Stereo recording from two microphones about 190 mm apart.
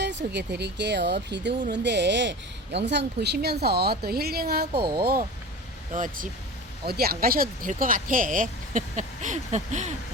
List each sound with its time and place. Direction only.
0.0 s speech: 65° right (ahead or behind)
5.9 s speech: 45° right (ahead or behind)
6.8 s speech: 55° right (ahead or behind); by 9.9 s 40° right (ahead or behind)